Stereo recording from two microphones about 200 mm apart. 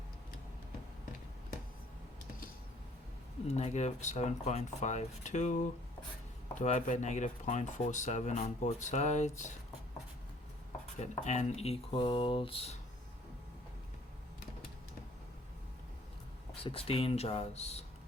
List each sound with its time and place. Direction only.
3.4 s speech: 35° left (ahead or behind)
11.0 s speech: 35° left (ahead or behind)
16.6 s speech: 25° left (ahead or behind)